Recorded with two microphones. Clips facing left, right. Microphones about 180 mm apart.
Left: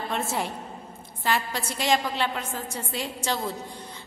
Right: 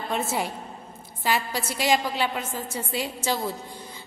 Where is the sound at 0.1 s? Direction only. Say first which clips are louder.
Right 3 dB; centre (ahead or behind).